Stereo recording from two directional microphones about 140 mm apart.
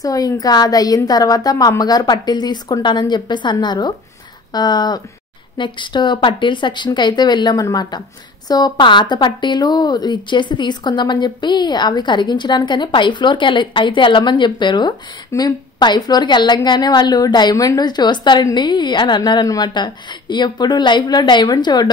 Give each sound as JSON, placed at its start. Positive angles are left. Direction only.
{"t": 0.0, "sound": "a woman's voice", "side_deg": 25}